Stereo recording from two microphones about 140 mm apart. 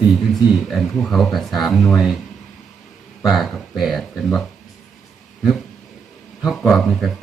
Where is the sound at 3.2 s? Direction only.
Centre (ahead or behind).